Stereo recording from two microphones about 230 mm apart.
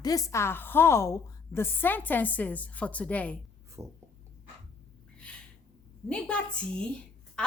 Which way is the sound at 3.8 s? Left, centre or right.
Centre.